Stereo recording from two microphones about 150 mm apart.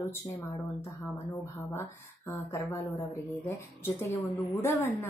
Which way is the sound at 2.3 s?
20° left (ahead or behind).